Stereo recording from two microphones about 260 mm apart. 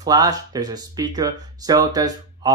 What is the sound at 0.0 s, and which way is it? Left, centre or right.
Speech, centre.